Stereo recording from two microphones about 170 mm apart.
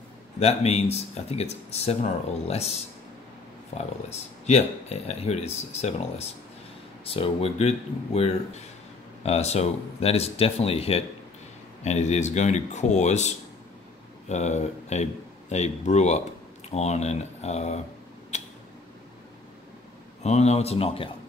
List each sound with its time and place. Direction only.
0.4 s speech: 35° left (ahead or behind)
14.3 s speech: 40° left (ahead or behind)
18.3 s a sound: 45° left (ahead or behind)
20.2 s speech: 40° left (ahead or behind)